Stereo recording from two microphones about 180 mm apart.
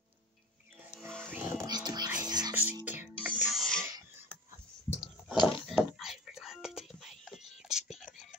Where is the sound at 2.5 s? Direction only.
10° right (ahead or behind).